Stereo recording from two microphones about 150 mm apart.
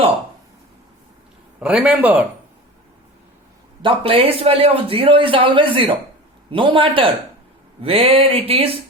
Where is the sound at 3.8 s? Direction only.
35° right (ahead or behind).